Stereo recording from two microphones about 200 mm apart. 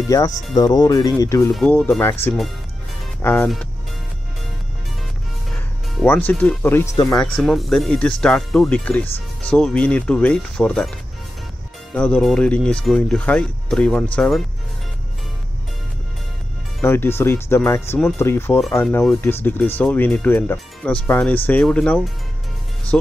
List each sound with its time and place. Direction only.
0.1 s speech: 20° left (ahead or behind)
6.0 s speech: 10° left (ahead or behind)
11.9 s speech: 5° left (ahead or behind)
16.8 s speech: 10° left (ahead or behind)